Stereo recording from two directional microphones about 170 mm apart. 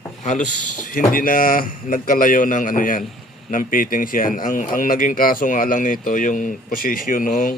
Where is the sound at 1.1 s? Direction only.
55° left (ahead or behind).